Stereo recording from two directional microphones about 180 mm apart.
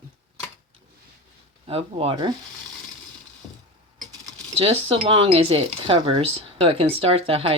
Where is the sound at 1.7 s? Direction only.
30° right (ahead or behind).